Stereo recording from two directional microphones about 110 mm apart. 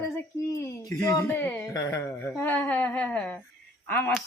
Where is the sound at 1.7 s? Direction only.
35° left (ahead or behind).